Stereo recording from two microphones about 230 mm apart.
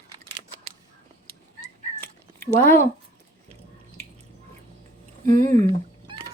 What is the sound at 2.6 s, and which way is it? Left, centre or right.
Speech, centre.